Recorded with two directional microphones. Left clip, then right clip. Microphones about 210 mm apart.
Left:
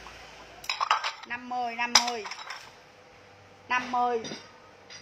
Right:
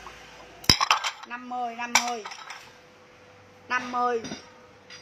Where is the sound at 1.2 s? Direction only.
15° left (ahead or behind).